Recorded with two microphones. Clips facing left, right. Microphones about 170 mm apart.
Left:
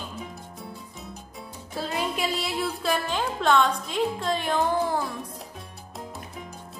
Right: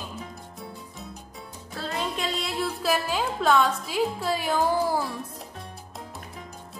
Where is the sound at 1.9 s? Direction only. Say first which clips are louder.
Left 1 dB; 5° left (ahead or behind).